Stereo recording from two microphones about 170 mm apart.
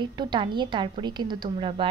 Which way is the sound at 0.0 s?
25° right (ahead or behind).